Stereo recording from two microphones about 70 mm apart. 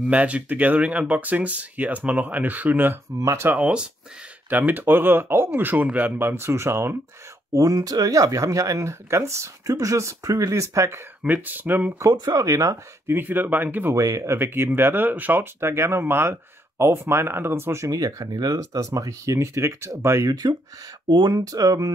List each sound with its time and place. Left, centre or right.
0.0 s speech: centre; by 7.0 s right
7.5 s speech: right
11.2 s speech: right
12.0 s speech: right
13.0 s speech: right
13.9 s speech: right
17.8 s speech: right
20.2 s speech: right